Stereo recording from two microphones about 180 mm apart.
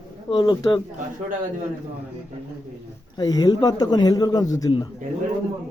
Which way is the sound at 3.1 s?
20° left (ahead or behind).